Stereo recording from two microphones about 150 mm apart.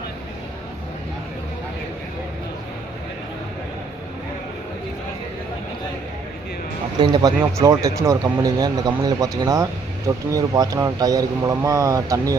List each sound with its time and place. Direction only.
7.0 s speech: 30° right (ahead or behind)